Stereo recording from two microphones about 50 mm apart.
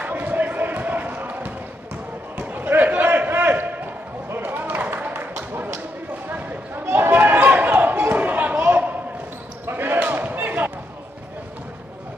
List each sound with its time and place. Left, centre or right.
0.0 s basketball bounce: right
2.3 s a sound: right
4.4 s music: right
6.2 s a sound: right
9.7 s basketball bounce: right
9.9 s basketball bounce: right